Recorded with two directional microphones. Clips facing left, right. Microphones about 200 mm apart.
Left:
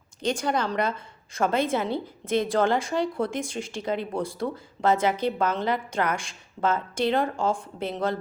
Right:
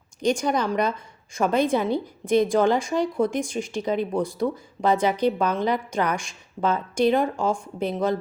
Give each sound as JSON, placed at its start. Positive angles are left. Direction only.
{"t": 0.2, "sound": "a woman's voice", "side_deg": -15}